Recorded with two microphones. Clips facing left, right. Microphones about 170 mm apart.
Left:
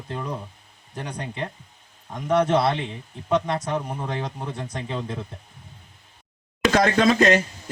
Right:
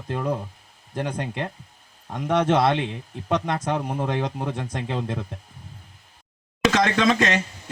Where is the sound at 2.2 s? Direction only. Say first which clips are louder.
Even; 55° right (ahead or behind).